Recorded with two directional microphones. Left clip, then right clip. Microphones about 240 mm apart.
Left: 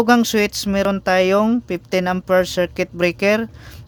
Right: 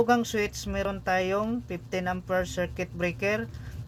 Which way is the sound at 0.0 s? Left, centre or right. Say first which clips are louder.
Left 9 dB; left.